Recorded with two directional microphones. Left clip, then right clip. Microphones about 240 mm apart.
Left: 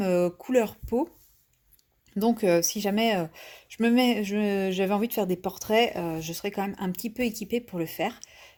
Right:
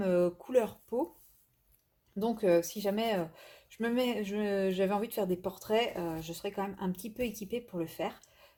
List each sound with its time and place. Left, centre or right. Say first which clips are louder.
0.0 s speech: left 4 dB; left
2.2 s speech: left 5 dB; left